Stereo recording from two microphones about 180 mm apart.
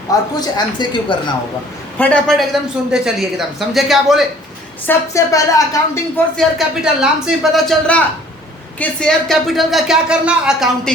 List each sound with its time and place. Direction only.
0.1 s speech: 20° left (ahead or behind)
2.0 s a man's voice: 5° left (ahead or behind)
4.9 s a woman's voice: 15° left (ahead or behind)
6.3 s a man's voice: centre (ahead or behind)